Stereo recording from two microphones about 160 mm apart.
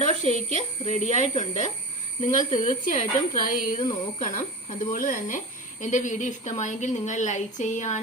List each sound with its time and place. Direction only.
0.0 s a woman's voice: 45° left (ahead or behind)
4.2 s a woman's voice: 50° left (ahead or behind)